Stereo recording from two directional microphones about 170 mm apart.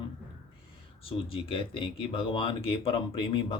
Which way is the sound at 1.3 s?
30° left (ahead or behind).